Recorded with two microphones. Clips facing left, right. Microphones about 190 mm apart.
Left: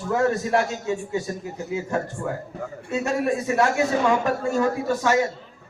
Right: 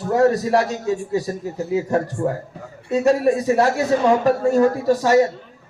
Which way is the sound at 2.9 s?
35° right (ahead or behind).